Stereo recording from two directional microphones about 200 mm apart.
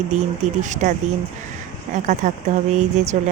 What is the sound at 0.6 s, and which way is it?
Speech, 40° right (ahead or behind).